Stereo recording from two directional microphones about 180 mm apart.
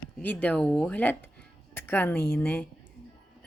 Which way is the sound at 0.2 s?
10° left (ahead or behind).